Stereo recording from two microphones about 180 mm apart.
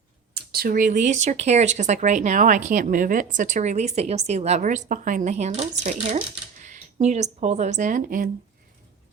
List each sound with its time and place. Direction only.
0.3 s speech: 60° right (ahead or behind)